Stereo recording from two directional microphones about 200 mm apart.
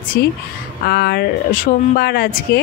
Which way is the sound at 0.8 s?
55° left (ahead or behind).